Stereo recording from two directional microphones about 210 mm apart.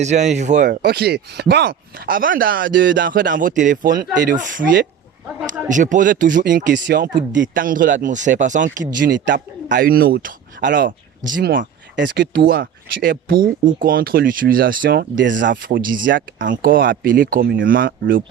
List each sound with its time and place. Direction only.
0.0 s speech: 35° right (ahead or behind)
0.8 s speech: 50° right (ahead or behind)
6.8 s speech: 55° right (ahead or behind)
7.5 s speech: 40° right (ahead or behind)
9.2 s speech: 55° right (ahead or behind)
15.4 s speech: 40° right (ahead or behind)